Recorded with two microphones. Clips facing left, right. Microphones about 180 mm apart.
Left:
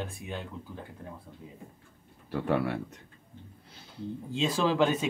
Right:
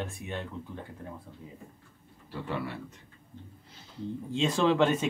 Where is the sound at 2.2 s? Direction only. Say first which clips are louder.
Left 7 dB; 60° left (ahead or behind).